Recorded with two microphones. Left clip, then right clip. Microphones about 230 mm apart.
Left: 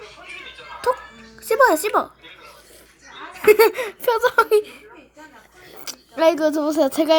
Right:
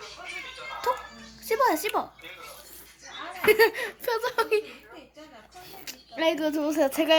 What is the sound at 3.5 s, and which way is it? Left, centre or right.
A woman's voice, left.